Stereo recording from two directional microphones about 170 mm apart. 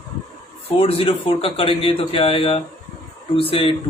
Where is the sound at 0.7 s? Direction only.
35° left (ahead or behind).